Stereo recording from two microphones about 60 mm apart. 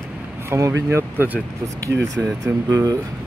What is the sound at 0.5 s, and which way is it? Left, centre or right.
Speech, right.